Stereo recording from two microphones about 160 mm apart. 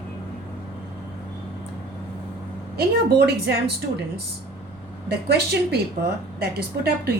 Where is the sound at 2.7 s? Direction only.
90° right.